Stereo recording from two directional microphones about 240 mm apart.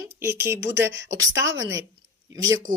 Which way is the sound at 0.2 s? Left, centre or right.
Centre.